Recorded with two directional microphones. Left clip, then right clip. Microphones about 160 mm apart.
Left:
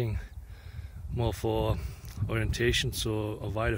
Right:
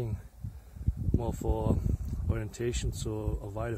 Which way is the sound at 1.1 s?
15° left (ahead or behind).